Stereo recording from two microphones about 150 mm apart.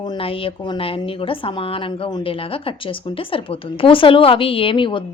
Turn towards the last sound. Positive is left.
turn(degrees=35)  # may be behind; listen again after turning